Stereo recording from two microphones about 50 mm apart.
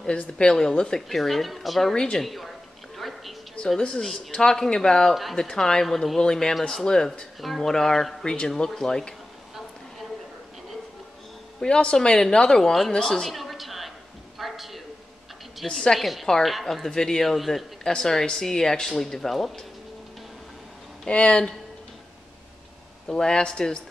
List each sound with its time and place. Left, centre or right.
0.4 s speech: centre
3.0 s music: centre
4.0 s speech: centre
11.6 s a woman's voice: centre
14.4 s a sound: centre
15.6 s speech: centre
16.0 s speech: centre
21.1 s speech: left
23.0 s speech: centre